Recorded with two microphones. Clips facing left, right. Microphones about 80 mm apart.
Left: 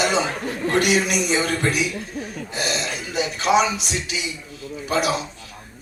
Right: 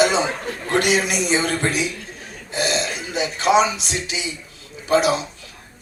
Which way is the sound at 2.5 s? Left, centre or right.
Right.